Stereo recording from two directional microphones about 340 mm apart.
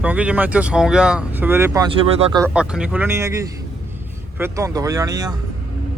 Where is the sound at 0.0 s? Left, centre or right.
Centre.